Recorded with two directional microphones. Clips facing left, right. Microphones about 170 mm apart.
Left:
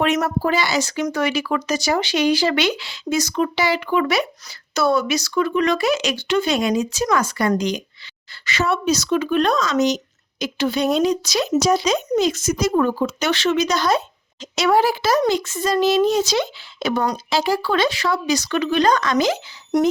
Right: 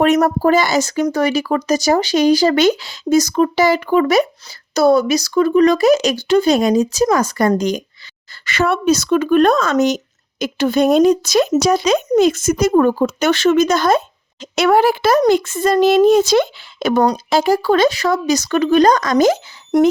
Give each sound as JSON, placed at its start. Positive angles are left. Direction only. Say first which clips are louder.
{"t": 0.0, "sound": "speech", "louder": "right 6 dB", "side_deg": -40}
{"t": 8.4, "sound": "speech", "louder": "right 5 dB", "side_deg": -55}